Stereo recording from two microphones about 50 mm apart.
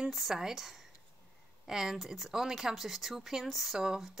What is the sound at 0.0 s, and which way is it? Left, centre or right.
Speech, centre.